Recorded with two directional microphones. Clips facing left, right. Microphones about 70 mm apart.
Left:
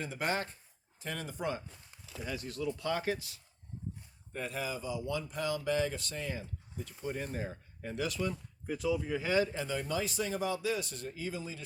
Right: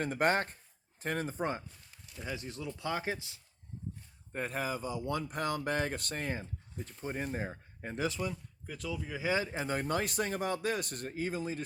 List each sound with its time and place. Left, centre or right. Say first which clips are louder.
0.0 s speech: right 5 dB; right
2.2 s speech: left 3 dB; right
4.3 s speech: right 2 dB; right
7.0 s speech: right 1 dB; right
8.6 s speech: left 7 dB; centre
9.2 s speech: even; right
9.6 s speech: right 2 dB; right